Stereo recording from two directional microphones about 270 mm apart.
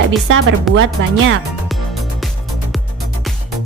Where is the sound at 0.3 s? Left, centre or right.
Right.